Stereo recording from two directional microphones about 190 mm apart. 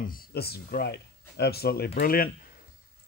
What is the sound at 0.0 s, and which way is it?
Speech, 50° left (ahead or behind).